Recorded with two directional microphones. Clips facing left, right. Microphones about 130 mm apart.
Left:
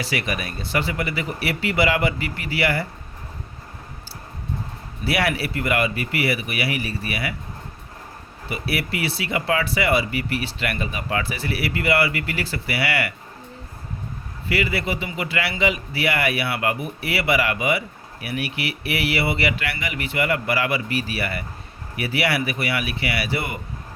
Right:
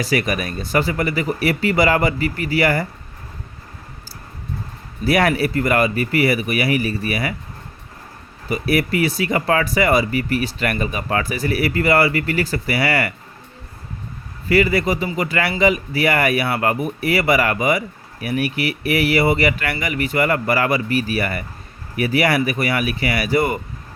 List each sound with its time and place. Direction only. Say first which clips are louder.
0.0 s speech: right 6 dB; 40° right (ahead or behind)
5.0 s speech: right 6 dB; 45° right (ahead or behind)
8.4 s speech: right 7 dB; 40° right (ahead or behind)
14.5 s speech: right 7 dB; 40° right (ahead or behind)